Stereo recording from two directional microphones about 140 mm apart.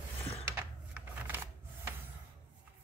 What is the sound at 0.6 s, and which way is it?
Typewriter, 15° right (ahead or behind).